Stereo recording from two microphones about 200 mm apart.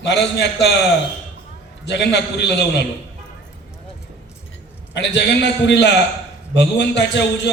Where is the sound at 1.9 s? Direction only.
60° left (ahead or behind).